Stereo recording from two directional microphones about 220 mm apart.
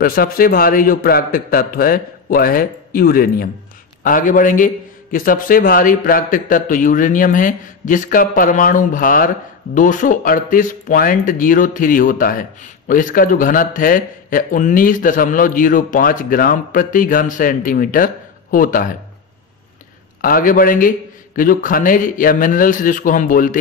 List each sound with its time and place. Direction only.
0.0 s speech: 40° left (ahead or behind)
20.2 s speech: 40° left (ahead or behind)